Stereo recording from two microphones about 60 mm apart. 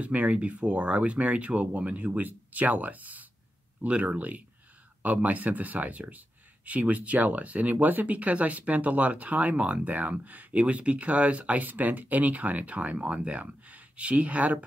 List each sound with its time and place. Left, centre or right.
0.0 s speech: right